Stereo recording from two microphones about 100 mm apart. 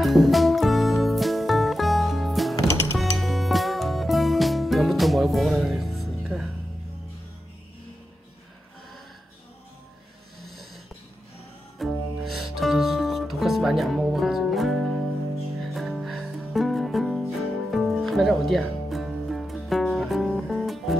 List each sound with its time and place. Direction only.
0.0 s music: centre (ahead or behind)
11.8 s music: centre (ahead or behind)